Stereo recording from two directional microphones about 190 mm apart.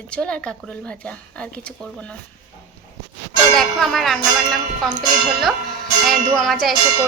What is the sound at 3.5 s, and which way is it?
A woman's voice, centre (ahead or behind).